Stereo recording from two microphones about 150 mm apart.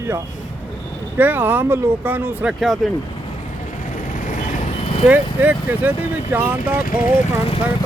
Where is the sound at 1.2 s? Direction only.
15° right (ahead or behind).